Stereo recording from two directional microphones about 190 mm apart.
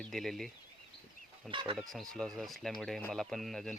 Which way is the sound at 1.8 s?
Centre (ahead or behind).